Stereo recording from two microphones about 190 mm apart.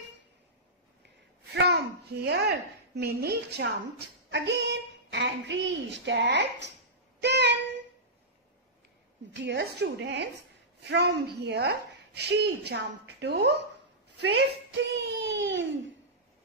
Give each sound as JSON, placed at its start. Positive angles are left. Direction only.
{"t": 1.5, "sound": "a woman's voice", "side_deg": -60}
{"t": 7.2, "sound": "child singing", "side_deg": -65}
{"t": 9.3, "sound": "a child's voice", "side_deg": -70}